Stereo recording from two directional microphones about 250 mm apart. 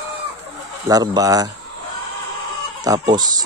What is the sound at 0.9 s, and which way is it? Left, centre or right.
Speech, centre.